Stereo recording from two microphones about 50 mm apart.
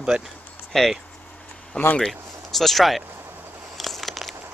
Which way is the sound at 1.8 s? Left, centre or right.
Left.